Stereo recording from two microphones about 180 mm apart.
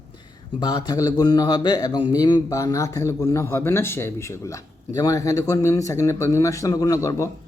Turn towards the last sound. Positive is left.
turn(degrees=20)  # may be behind; listen again after turning